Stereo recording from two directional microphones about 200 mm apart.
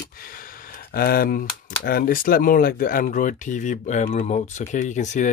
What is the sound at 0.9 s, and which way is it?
Speech, 45° left (ahead or behind).